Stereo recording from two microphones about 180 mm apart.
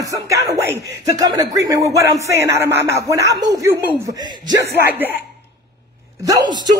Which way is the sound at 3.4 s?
20° right (ahead or behind).